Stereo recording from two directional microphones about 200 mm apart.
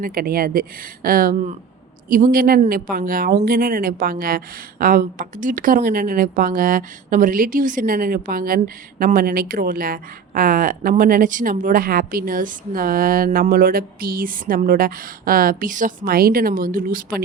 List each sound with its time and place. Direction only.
0.0 s speech: 45° right (ahead or behind)